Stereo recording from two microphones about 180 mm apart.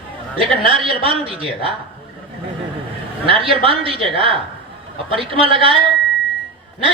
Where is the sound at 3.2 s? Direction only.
30° right (ahead or behind).